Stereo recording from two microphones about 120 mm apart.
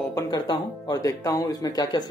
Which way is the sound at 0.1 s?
35° left (ahead or behind).